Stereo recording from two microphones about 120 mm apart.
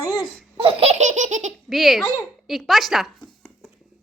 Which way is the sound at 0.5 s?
50° right (ahead or behind).